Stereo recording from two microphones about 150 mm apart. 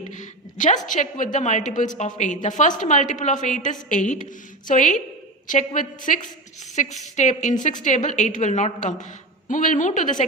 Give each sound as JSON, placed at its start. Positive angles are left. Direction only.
{"t": 0.1, "sound": "a woman's voice", "side_deg": 55}